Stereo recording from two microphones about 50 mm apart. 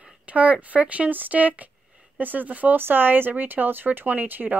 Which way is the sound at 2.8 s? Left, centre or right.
Right.